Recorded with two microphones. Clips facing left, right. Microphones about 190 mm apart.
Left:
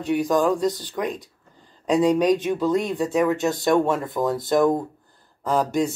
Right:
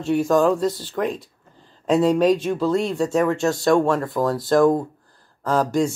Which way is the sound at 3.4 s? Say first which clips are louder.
Right 2 dB; 20° left (ahead or behind).